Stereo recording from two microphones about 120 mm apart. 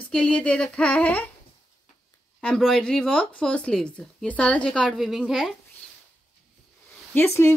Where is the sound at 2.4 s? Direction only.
5° left (ahead or behind).